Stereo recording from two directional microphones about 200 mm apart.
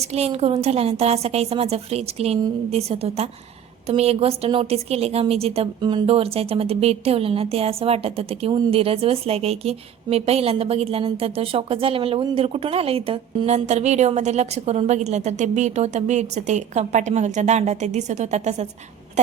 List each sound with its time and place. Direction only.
0.0 s a woman's voice: 30° right (ahead or behind)